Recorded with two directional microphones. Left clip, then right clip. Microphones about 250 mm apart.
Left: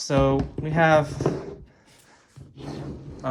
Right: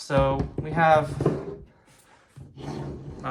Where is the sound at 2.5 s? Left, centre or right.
Centre.